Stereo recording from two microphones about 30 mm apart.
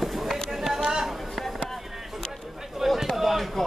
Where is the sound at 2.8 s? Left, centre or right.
Centre.